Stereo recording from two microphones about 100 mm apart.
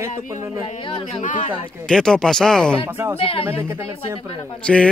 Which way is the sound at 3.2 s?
65° left (ahead or behind).